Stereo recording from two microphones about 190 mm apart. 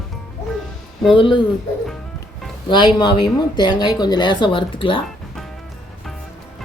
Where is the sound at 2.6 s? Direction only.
25° left (ahead or behind).